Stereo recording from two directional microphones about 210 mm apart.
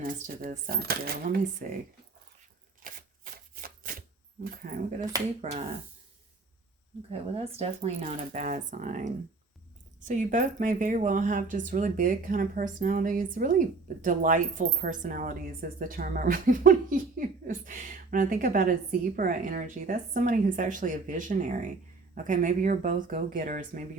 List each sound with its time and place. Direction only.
0.0 s speech: 40° right (ahead or behind)
3.5 s typewriter: 45° right (ahead or behind)
4.5 s speech: 40° right (ahead or behind)
7.1 s speech: 30° right (ahead or behind)